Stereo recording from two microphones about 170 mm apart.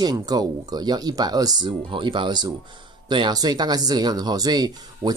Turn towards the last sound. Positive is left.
turn(degrees=-25)  # may be behind; listen again after turning